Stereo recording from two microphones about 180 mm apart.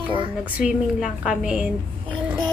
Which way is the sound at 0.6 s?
5° right (ahead or behind).